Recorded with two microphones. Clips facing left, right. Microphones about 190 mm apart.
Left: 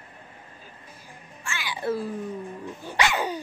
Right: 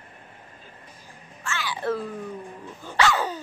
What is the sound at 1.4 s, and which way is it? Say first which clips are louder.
Music: right 2 dB; 10° left (ahead or behind).